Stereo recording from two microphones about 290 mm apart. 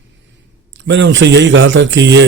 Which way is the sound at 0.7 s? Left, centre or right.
Right.